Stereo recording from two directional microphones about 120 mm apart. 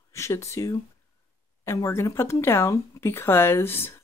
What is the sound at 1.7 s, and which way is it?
Speech, 25° left (ahead or behind).